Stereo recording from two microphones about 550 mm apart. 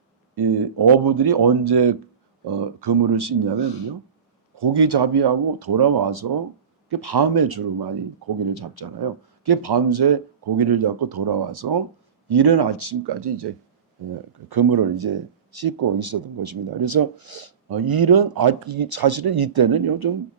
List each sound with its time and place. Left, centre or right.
0.3 s speech: right
4.5 s speech: right
14.5 s speech: right